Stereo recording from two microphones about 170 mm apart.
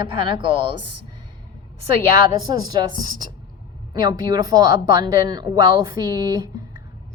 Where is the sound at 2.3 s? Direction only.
25° right (ahead or behind).